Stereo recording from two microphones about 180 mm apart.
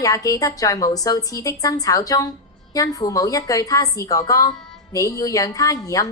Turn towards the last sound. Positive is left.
turn(degrees=20)  # may be behind; listen again after turning